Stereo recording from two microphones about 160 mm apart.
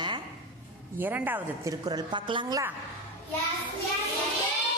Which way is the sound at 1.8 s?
25° right (ahead or behind).